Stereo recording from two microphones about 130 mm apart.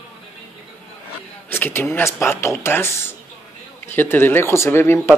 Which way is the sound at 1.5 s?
15° left (ahead or behind).